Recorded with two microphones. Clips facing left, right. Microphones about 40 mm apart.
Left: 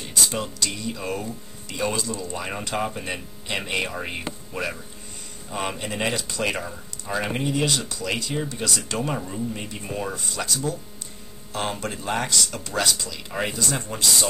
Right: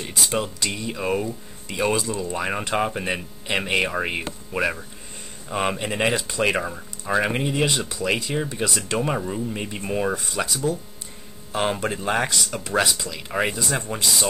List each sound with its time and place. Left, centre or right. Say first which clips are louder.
0.0 s speech: right 2 dB; centre
11.5 s speech: right 5 dB; right